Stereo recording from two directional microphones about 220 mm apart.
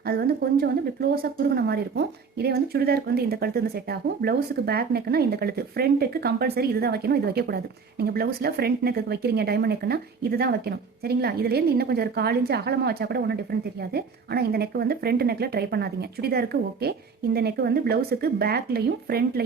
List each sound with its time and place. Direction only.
0.0 s a woman's voice: 45° right (ahead or behind)